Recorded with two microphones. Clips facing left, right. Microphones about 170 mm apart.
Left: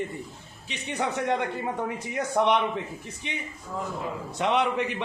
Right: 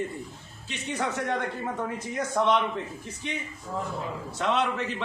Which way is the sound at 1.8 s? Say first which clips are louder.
Left 1 dB; 15° left (ahead or behind).